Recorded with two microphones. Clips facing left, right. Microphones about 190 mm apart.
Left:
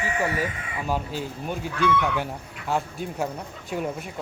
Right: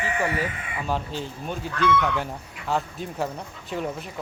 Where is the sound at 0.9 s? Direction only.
10° left (ahead or behind).